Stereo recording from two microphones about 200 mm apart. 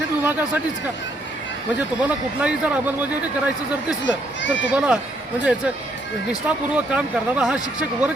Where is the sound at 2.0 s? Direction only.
5° right (ahead or behind).